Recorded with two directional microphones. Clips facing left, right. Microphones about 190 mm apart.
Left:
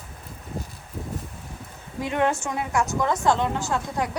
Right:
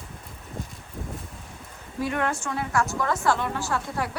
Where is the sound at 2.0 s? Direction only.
20° left (ahead or behind).